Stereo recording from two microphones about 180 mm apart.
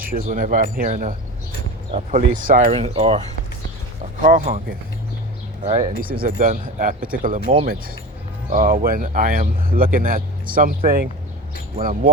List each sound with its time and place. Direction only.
0.1 s speech: 50° right (ahead or behind)
2.7 s speech: 35° right (ahead or behind)
4.2 s speech: 45° right (ahead or behind)
5.6 s speech: 35° right (ahead or behind)
6.0 s speech: 50° right (ahead or behind)